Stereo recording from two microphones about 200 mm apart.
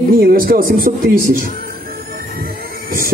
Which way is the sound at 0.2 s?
45° right (ahead or behind).